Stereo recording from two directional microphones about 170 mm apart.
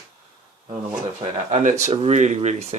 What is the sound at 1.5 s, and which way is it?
Speech, 40° right (ahead or behind).